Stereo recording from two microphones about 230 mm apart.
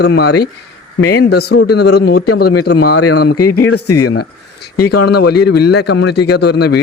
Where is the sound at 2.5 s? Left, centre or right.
Left.